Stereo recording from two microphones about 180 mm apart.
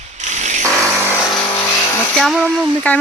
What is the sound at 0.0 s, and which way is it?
Mechanisms, 40° right (ahead or behind).